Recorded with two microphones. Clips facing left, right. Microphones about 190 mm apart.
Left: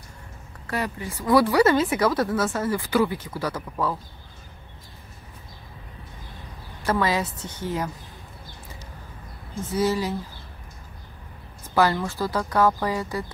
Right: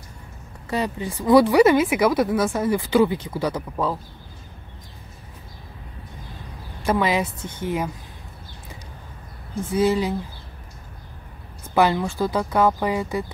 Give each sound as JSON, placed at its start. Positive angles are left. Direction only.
{"t": 0.7, "sound": "speech", "side_deg": -20}
{"t": 6.9, "sound": "speech", "side_deg": -15}
{"t": 9.7, "sound": "speech", "side_deg": -15}
{"t": 11.7, "sound": "speech", "side_deg": -20}